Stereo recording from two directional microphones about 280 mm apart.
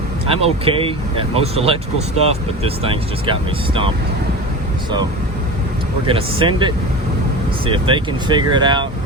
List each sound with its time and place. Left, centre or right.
0.3 s speech: centre
6.1 s speech: centre